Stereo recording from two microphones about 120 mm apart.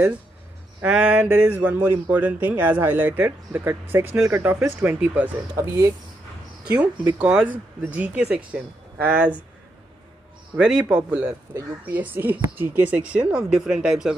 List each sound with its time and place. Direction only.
0.8 s speech: 10° right (ahead or behind)
6.7 s speech: 15° right (ahead or behind)
10.5 s speech: 5° right (ahead or behind)